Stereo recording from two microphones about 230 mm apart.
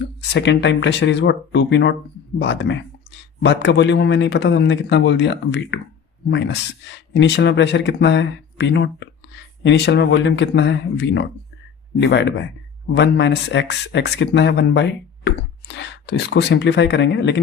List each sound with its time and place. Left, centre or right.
0.0 s speech: left